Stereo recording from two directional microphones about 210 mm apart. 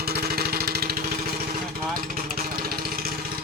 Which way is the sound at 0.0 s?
45° right (ahead or behind).